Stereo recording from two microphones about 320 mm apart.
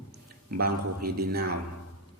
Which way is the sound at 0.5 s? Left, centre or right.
Right.